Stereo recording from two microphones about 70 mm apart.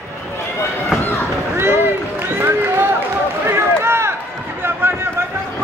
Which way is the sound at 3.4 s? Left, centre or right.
Right.